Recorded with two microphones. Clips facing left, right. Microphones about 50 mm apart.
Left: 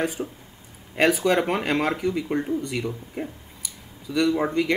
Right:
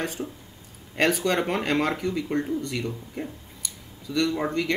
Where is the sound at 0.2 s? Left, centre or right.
Centre.